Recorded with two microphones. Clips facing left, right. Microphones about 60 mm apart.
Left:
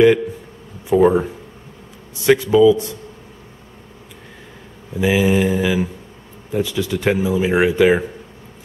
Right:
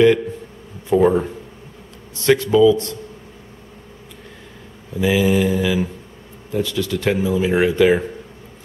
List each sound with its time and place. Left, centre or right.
0.8 s speech: centre
4.9 s mantra: centre
6.5 s speech: centre